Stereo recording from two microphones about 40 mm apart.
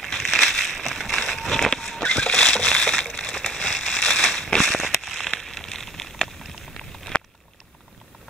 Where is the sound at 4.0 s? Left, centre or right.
Centre.